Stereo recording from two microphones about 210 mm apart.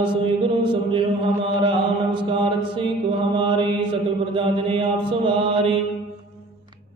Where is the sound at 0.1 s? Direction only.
25° right (ahead or behind).